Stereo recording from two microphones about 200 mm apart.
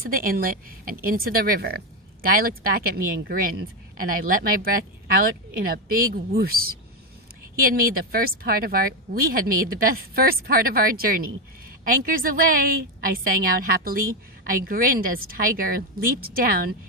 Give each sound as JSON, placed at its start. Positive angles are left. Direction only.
{"t": 0.0, "sound": "speech", "side_deg": -45}
{"t": 8.1, "sound": "speech", "side_deg": -45}